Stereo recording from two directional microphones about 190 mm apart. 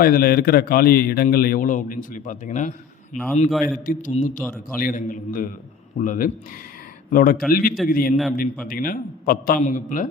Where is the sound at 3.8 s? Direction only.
40° left (ahead or behind).